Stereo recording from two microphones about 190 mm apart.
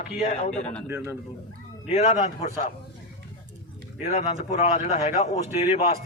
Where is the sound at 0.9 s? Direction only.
10° right (ahead or behind).